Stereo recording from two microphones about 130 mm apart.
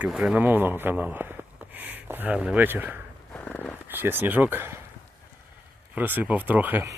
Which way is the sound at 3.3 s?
10° left (ahead or behind).